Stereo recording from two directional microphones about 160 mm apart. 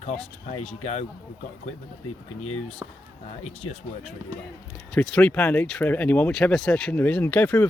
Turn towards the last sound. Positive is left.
turn(degrees=10)  # may be behind; listen again after turning